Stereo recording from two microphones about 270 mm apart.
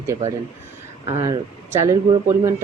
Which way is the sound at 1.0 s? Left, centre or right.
Centre.